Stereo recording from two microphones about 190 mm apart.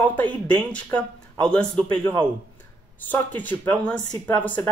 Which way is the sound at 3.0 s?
10° left (ahead or behind).